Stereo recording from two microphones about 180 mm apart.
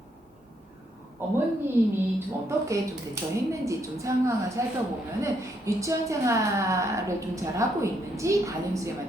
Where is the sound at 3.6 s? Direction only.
15° right (ahead or behind).